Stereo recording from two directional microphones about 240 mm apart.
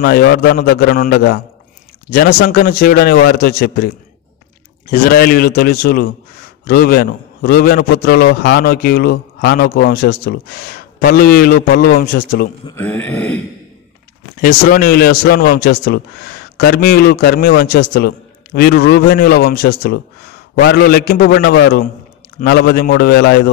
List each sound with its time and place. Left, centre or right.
0.0 s a man's voice: left
4.9 s a man's voice: left
12.6 s speech: centre
14.3 s a man's voice: left